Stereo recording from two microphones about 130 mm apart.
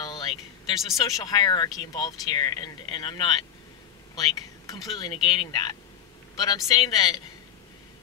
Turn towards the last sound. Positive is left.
turn(degrees=30)  # may be behind; listen again after turning